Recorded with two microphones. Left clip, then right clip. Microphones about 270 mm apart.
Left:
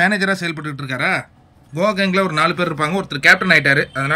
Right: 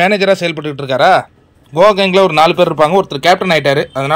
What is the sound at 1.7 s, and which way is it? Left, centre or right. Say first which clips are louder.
A man's voice: right 9 dB; centre.